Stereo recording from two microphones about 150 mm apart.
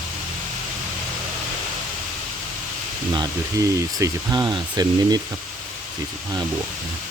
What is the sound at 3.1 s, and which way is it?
Speech, 25° right (ahead or behind).